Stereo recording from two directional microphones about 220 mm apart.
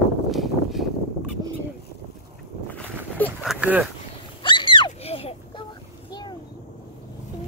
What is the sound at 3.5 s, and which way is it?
Speech, 5° right (ahead or behind).